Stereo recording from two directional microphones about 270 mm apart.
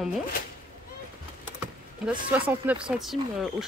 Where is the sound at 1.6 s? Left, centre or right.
Centre.